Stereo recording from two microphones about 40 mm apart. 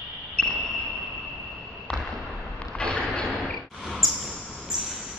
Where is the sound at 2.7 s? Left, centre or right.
Left.